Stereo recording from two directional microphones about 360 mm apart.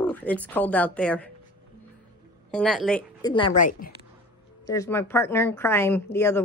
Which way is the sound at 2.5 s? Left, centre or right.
Centre.